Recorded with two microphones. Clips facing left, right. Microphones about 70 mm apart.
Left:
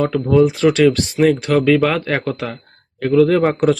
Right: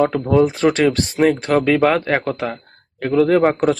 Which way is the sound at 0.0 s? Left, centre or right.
Right.